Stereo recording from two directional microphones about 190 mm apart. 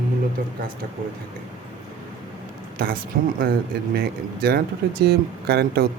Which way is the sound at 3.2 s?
50° right (ahead or behind).